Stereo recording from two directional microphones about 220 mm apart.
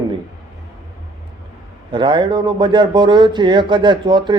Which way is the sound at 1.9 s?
20° right (ahead or behind).